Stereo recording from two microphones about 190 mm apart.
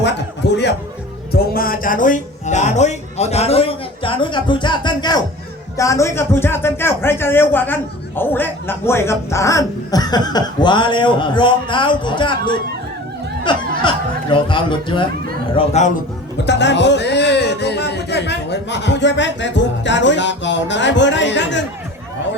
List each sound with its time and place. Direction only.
0.0 s a sound: 65° left (ahead or behind)
1.3 s a man's voice: 50° left (ahead or behind); by 15.0 s 25° left (ahead or behind)
15.5 s speech: 35° left (ahead or behind)
16.5 s speech: 65° left (ahead or behind)